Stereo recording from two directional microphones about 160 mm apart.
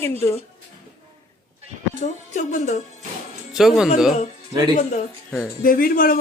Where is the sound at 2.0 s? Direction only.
50° left (ahead or behind).